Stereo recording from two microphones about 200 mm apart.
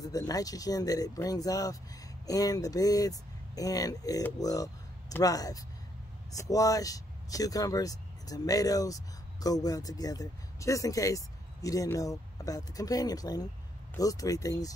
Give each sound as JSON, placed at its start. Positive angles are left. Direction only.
{"t": 0.0, "sound": "speech", "side_deg": 20}